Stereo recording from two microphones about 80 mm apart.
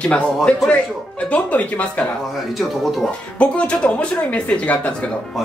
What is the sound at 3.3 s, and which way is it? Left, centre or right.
Speech, centre.